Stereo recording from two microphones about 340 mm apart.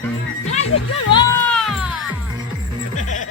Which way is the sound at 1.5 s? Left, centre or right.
Centre.